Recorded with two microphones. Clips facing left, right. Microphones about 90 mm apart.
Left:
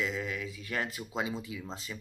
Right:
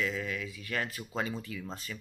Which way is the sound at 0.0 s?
25° left (ahead or behind).